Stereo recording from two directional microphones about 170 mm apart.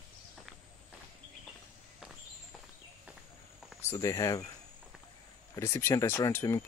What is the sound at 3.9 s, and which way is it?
Speech, 20° left (ahead or behind).